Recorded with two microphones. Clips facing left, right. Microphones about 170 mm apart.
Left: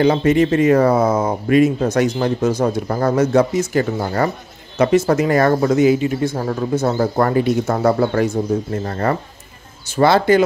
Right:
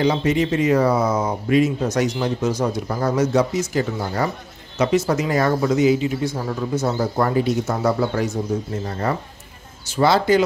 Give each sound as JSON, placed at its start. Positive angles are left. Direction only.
{"t": 0.0, "sound": "speech", "side_deg": 55}